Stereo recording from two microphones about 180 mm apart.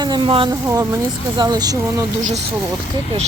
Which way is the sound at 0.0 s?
25° right (ahead or behind).